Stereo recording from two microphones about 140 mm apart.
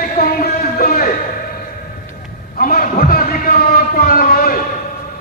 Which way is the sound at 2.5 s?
90° left.